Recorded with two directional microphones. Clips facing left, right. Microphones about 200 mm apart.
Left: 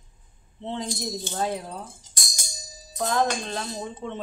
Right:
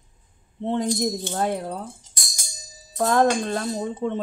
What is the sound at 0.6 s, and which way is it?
A woman's voice, 50° right (ahead or behind).